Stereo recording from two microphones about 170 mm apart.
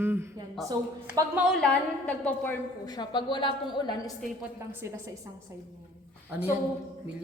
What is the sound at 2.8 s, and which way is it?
A woman's voice, 25° left (ahead or behind).